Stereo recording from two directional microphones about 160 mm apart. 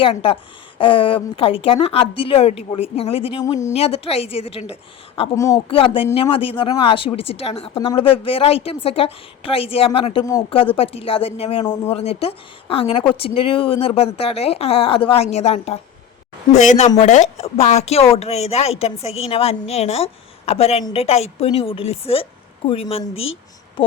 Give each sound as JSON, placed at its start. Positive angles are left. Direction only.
{"t": 0.0, "sound": "speech", "side_deg": 35}
{"t": 3.4, "sound": "speech", "side_deg": 20}
{"t": 3.7, "sound": "speech", "side_deg": 40}
{"t": 5.3, "sound": "speech", "side_deg": 20}
{"t": 5.6, "sound": "a woman's voice", "side_deg": 35}